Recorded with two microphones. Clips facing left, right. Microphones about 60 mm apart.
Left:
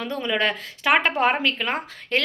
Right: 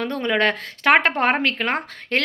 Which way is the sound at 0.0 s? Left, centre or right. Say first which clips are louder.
Right 3 dB; right.